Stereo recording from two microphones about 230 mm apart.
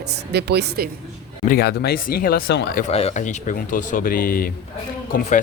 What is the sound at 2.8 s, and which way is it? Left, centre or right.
Speech, left.